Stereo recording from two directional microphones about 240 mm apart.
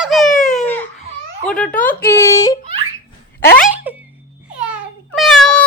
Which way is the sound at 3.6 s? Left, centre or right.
Centre.